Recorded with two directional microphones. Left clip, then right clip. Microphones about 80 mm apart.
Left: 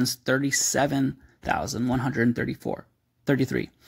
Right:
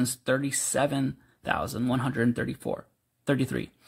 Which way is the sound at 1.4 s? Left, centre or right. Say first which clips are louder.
Left 2 dB; centre.